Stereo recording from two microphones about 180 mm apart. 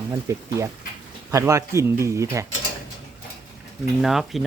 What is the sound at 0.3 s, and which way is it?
Speech, 15° right (ahead or behind).